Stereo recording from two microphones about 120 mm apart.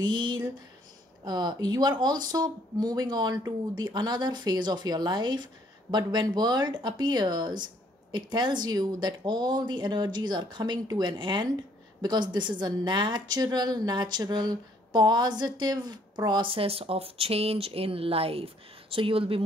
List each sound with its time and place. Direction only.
0.0 s speech: 40° right (ahead or behind)